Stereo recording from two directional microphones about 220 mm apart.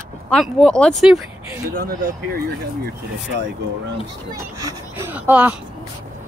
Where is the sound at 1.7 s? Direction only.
40° right (ahead or behind).